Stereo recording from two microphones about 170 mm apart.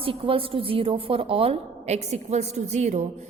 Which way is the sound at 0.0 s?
30° right (ahead or behind).